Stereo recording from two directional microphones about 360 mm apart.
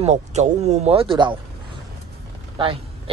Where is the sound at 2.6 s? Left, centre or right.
Centre.